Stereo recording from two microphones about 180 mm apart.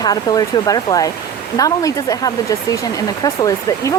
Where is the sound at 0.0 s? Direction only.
20° left (ahead or behind).